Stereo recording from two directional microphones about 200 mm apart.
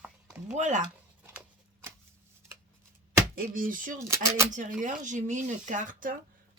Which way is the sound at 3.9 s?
15° right (ahead or behind).